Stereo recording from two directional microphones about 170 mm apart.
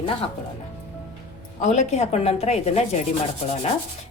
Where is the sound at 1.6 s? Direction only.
40° left (ahead or behind).